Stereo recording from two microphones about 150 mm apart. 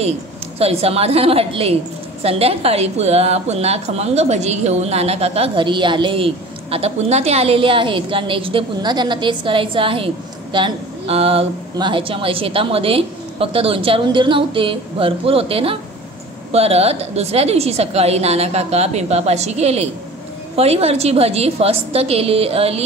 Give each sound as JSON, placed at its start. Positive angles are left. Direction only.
{"t": 0.6, "sound": "a woman's voice", "side_deg": -40}